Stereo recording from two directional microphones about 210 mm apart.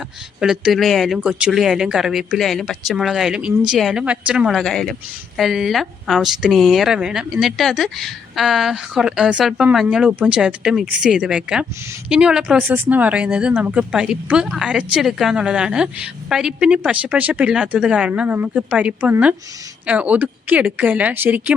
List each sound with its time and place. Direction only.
0.3 s speech: 5° right (ahead or behind)